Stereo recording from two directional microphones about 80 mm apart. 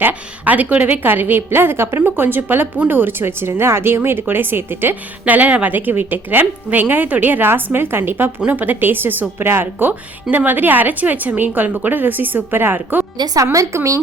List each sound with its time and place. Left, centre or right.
0.0 s speech: centre
13.1 s a woman's voice: right